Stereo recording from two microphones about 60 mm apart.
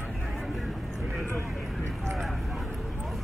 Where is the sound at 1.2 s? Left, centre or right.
Left.